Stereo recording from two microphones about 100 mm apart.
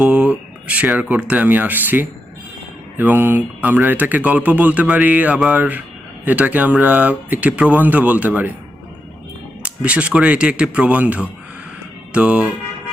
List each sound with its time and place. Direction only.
0.0 s speech: 10° right (ahead or behind)
9.6 s speech: 10° right (ahead or behind)